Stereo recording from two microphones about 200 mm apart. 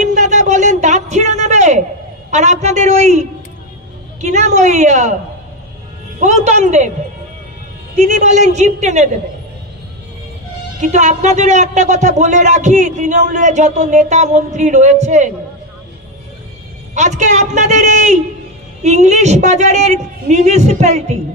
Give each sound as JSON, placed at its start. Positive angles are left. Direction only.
{"t": 0.0, "sound": "a sound", "side_deg": -35}
{"t": 2.3, "sound": "a man's voice", "side_deg": -35}
{"t": 6.1, "sound": "a man's voice", "side_deg": -35}
{"t": 7.9, "sound": "a man's voice", "side_deg": -35}
{"t": 10.8, "sound": "a man's voice", "side_deg": -35}
{"t": 16.9, "sound": "a man's voice", "side_deg": -35}